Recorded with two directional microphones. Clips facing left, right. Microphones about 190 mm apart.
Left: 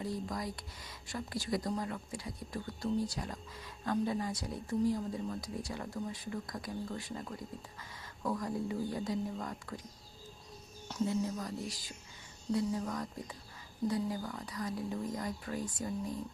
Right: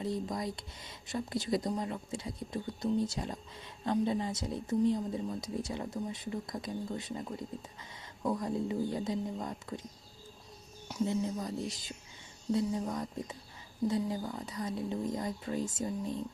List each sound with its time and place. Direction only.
0.0 s speech: 20° right (ahead or behind)
11.0 s speech: 20° right (ahead or behind)